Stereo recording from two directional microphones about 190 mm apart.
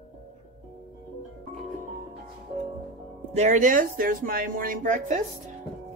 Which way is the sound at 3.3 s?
35° right (ahead or behind).